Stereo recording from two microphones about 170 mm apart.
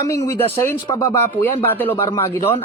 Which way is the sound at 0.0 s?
20° left (ahead or behind).